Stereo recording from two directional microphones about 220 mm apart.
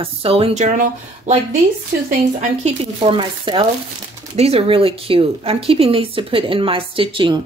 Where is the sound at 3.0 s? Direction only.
20° right (ahead or behind).